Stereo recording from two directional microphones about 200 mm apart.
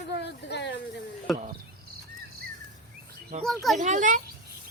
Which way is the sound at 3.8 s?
40° right (ahead or behind).